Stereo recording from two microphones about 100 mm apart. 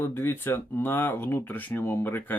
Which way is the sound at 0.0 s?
25° left (ahead or behind).